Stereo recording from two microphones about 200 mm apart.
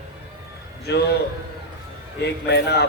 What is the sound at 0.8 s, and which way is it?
Speech, 55° left (ahead or behind).